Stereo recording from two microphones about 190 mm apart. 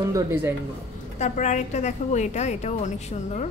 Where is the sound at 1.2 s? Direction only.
40° left (ahead or behind).